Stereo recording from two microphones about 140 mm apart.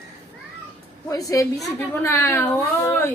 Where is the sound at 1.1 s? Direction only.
25° left (ahead or behind).